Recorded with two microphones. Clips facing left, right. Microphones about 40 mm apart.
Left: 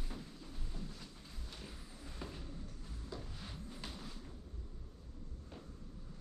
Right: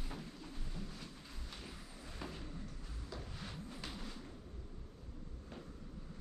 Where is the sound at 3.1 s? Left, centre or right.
Centre.